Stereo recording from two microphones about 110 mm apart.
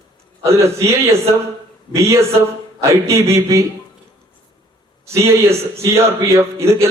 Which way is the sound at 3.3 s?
25° right (ahead or behind).